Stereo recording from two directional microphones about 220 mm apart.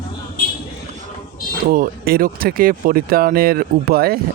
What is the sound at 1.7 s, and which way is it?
Speech, 40° right (ahead or behind).